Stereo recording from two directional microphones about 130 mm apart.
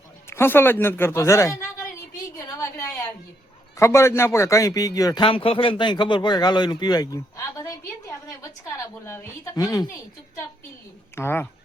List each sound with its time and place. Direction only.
0.3 s speech: 20° left (ahead or behind)
2.6 s a sound: 20° left (ahead or behind)
3.8 s speech: 20° left (ahead or behind)
5.2 s speech: 45° left (ahead or behind); by 9.9 s 30° left (ahead or behind)
11.1 s speech: 15° left (ahead or behind)